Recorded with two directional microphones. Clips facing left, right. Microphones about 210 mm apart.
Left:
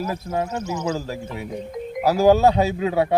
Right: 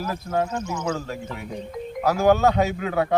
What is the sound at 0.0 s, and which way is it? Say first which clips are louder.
Speech: left 2 dB; 25° left (ahead or behind).